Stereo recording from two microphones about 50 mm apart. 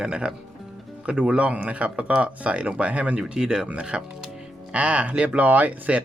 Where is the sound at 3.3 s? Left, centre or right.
Centre.